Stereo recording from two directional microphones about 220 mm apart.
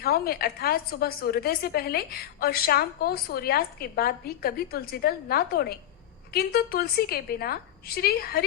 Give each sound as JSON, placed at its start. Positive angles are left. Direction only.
{"t": 0.0, "sound": "a woman's voice", "side_deg": 45}